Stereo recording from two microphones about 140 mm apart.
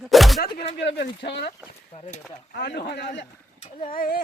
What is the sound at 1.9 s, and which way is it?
Speech, 45° left (ahead or behind).